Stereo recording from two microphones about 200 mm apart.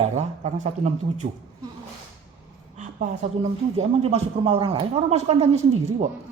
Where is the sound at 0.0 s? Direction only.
35° right (ahead or behind).